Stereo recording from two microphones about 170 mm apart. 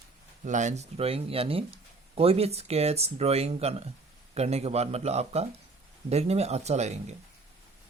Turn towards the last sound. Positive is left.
turn(degrees=-40)  # may be behind; listen again after turning